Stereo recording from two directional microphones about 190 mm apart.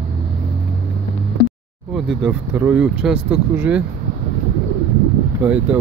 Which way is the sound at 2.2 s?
10° right (ahead or behind).